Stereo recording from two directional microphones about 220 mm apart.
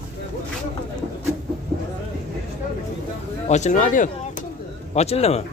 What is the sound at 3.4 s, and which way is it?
Speech, 30° left (ahead or behind).